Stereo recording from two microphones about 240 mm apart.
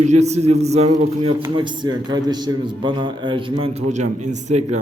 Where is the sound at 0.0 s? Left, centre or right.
Right.